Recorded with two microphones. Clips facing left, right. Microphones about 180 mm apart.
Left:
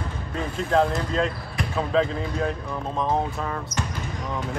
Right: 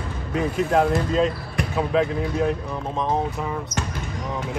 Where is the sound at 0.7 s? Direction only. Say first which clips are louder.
Even; 10° right (ahead or behind).